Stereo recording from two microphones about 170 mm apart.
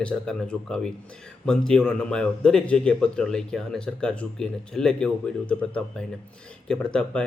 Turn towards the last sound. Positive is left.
turn(degrees=5)  # may be behind; listen again after turning